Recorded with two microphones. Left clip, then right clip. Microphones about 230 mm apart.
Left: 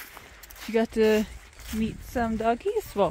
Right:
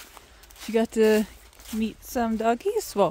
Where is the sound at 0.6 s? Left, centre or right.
Centre.